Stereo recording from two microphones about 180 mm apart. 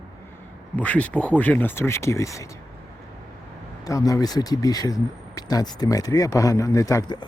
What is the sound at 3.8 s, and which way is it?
Speech, 20° left (ahead or behind).